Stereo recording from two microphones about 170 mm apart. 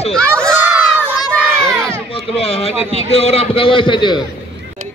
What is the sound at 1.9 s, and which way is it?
A man's voice, 35° left (ahead or behind).